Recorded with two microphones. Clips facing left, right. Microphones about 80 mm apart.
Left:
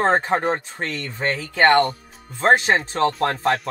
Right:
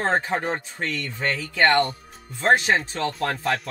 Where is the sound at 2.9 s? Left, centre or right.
Left.